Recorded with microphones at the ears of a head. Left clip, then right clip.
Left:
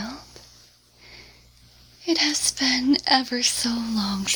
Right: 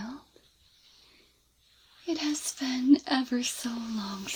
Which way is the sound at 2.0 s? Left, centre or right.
Left.